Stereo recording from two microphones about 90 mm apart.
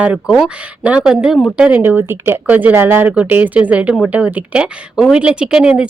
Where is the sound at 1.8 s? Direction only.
25° right (ahead or behind).